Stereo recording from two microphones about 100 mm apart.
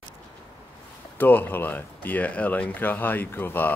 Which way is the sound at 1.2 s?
20° left (ahead or behind).